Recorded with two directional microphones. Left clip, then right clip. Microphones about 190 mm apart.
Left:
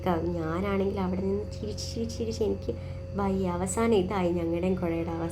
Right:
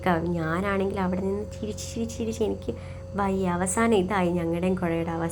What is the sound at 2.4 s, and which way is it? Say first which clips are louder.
A woman's voice: right 1 dB; 25° right (ahead or behind).